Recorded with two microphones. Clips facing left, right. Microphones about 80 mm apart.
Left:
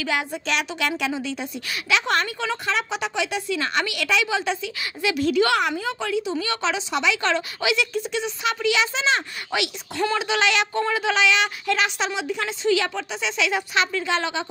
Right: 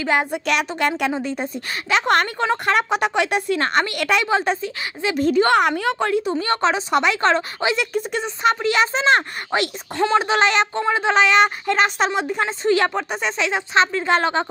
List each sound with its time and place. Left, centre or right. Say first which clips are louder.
0.0 s speech: right 5 dB; right
5.8 s speech: right 5 dB; right
13.5 s speech: right 7 dB; right